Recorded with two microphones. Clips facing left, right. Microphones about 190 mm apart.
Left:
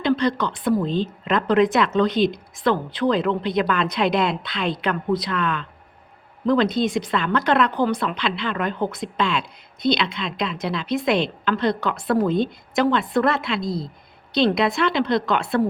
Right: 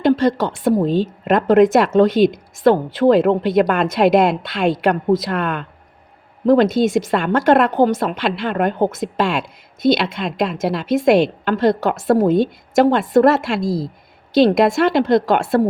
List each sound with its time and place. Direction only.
0.2 s speech: 50° right (ahead or behind)